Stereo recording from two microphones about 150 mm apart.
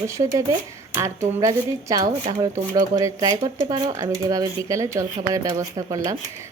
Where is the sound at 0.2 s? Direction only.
35° right (ahead or behind).